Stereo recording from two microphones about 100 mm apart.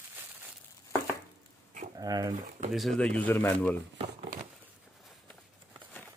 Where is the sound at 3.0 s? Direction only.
15° left (ahead or behind).